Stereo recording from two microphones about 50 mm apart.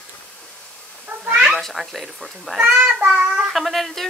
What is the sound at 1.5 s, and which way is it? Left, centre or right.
Speech, centre.